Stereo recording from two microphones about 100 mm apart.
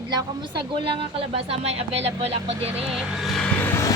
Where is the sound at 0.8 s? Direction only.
65° right (ahead or behind); by 2.8 s 85° right.